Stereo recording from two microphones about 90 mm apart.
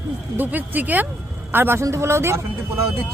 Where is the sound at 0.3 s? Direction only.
20° right (ahead or behind).